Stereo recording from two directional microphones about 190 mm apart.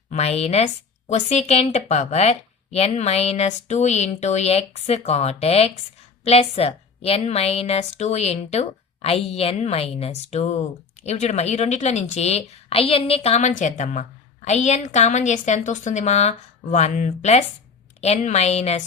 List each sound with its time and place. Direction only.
0.1 s a woman's voice: 35° left (ahead or behind)